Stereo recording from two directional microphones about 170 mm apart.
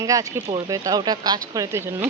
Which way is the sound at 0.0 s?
20° right (ahead or behind).